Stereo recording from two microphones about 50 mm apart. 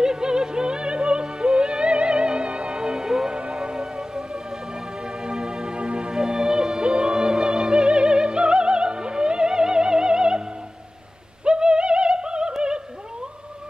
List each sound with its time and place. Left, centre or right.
0.0 s music: centre
11.4 s music: centre
12.5 s opera: centre